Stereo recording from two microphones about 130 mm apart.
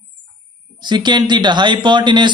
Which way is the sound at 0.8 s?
35° right (ahead or behind).